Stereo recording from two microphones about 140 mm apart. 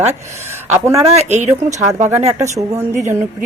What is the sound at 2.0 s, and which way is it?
Speech, 20° right (ahead or behind).